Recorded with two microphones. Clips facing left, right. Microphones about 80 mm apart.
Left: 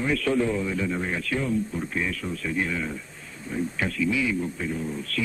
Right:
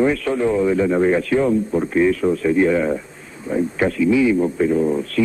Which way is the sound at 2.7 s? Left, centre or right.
Right.